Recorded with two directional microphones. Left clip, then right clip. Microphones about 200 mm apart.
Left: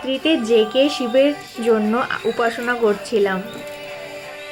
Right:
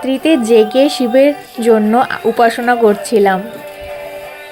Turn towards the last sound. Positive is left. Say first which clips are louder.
# right 7 dB
turn(degrees=-40)  # may be behind; listen again after turning